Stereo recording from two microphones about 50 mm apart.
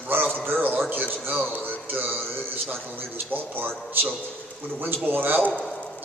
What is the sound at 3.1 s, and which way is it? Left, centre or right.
A man's voice, right.